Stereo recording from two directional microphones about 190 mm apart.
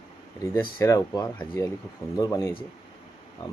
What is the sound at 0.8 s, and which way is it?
Speech, 15° left (ahead or behind).